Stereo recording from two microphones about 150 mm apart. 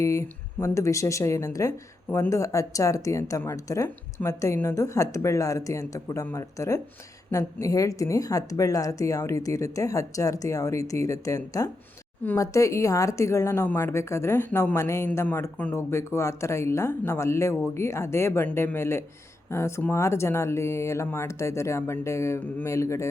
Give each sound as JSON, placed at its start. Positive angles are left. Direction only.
{"t": 0.0, "sound": "speech", "side_deg": 20}